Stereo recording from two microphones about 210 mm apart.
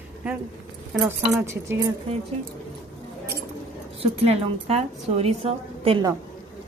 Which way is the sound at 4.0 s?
30° right (ahead or behind).